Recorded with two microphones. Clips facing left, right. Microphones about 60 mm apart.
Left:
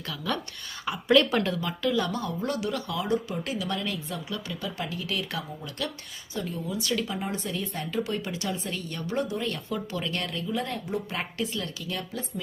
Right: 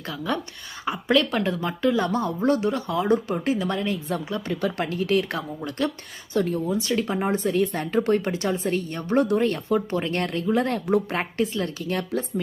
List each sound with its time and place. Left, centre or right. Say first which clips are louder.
0.3 s speech: right 3 dB; centre
1.1 s speech: even; centre
1.5 s speech: right 5 dB; right
4.6 s speech: right 8 dB; right
6.7 s speech: right 5 dB; right
7.6 s speech: right 10 dB; right
7.9 s speech: right 8 dB; right
9.1 s speech: right 9 dB; right
9.4 s speech: right 9 dB; right
11.1 s speech: right 6 dB; right